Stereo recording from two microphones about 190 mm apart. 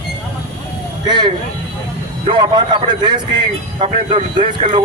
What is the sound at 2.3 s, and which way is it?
A man's voice, 25° right (ahead or behind).